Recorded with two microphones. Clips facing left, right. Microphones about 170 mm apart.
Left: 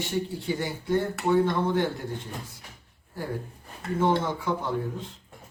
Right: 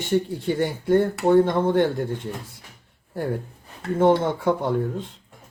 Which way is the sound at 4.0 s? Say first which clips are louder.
Right 6 dB; 60° right (ahead or behind).